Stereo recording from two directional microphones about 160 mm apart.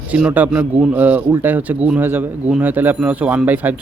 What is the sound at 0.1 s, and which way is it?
A man's voice, 10° right (ahead or behind).